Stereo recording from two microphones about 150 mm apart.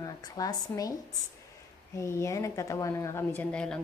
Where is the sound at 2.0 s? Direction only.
20° left (ahead or behind).